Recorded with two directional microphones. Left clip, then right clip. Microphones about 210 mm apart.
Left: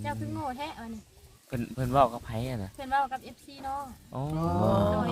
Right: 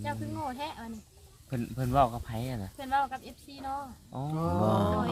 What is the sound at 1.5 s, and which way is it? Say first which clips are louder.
Speech: left 2 dB; 35° left (ahead or behind).